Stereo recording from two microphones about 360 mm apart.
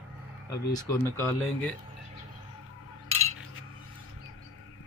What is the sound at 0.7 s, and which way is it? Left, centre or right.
Speech, centre.